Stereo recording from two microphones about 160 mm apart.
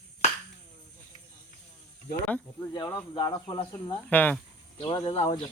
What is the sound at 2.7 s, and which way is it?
Speech, 25° left (ahead or behind).